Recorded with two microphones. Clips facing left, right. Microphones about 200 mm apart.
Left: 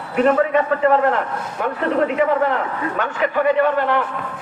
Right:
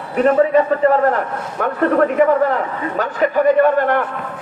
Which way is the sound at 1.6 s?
55° right (ahead or behind).